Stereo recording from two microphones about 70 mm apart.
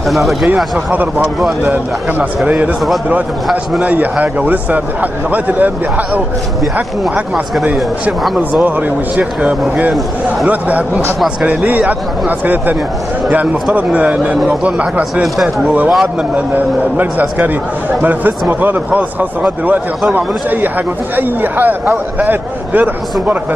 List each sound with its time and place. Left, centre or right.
0.1 s speech: centre
1.6 s a man's voice: right
3.8 s a man's voice: right
8.5 s a man's voice: right
18.5 s a man's voice: right